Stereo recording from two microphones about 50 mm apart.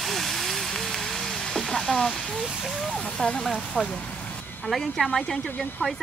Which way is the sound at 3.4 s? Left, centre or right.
Centre.